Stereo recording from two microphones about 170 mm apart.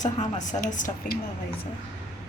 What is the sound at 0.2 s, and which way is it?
A woman's voice, 45° left (ahead or behind).